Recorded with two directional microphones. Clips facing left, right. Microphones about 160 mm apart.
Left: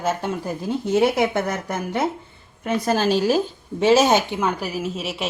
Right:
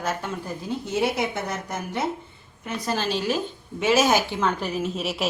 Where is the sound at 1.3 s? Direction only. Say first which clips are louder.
Left 6 dB; 60° left (ahead or behind); by 3.4 s 40° left (ahead or behind).